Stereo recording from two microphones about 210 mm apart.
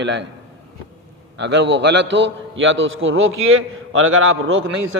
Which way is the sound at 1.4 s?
55° right (ahead or behind).